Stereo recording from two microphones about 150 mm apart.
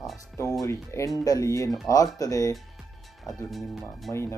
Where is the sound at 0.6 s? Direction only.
20° left (ahead or behind).